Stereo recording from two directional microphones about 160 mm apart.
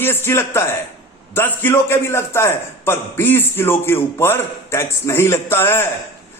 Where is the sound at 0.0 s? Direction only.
15° left (ahead or behind).